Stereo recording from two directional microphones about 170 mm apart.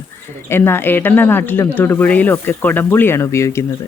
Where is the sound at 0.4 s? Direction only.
15° left (ahead or behind).